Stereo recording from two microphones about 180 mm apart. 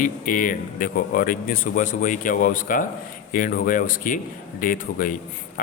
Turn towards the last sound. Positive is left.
turn(degrees=50)  # may be behind; listen again after turning